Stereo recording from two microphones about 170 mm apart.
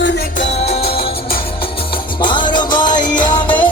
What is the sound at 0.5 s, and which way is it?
Music, 40° left (ahead or behind).